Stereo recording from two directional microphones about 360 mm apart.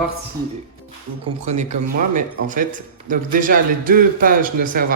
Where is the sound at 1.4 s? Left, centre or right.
Centre.